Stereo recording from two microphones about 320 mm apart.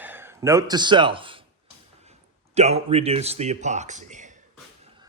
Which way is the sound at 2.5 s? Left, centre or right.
Centre.